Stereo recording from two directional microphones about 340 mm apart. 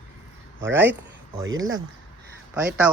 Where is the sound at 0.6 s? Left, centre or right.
Centre.